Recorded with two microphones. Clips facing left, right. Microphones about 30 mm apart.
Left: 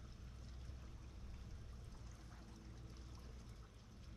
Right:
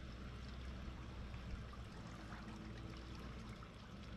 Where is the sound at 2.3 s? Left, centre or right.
Right.